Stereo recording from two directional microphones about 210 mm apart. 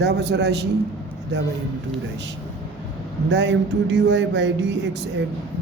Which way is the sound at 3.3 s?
55° right (ahead or behind).